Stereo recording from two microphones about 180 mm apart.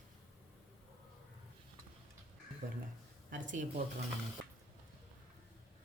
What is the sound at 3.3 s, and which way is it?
Speech, 45° right (ahead or behind).